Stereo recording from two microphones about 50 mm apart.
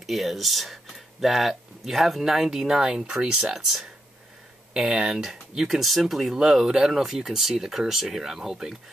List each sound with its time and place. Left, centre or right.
0.0 s speech: centre
5.1 s speech: centre